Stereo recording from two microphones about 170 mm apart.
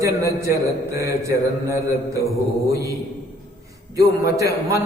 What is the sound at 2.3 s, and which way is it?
Mantra, 20° right (ahead or behind).